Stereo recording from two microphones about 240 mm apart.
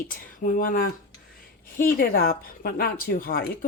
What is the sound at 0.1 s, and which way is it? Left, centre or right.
Speech, left.